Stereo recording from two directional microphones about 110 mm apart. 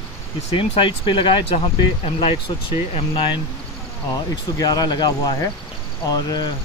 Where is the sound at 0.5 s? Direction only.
50° left (ahead or behind).